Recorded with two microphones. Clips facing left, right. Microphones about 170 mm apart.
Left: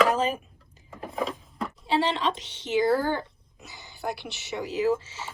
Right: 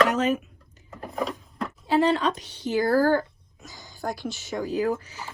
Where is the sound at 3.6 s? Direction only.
65° left (ahead or behind).